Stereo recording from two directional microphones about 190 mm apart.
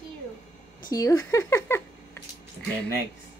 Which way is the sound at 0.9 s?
20° left (ahead or behind).